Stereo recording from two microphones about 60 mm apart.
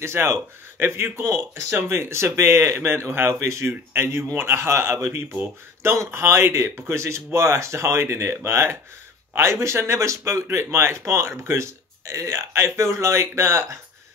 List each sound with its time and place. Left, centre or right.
0.0 s speech: right